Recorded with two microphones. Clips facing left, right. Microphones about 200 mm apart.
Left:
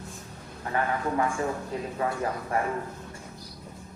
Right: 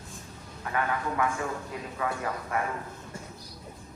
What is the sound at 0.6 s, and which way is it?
A man's voice, 30° left (ahead or behind).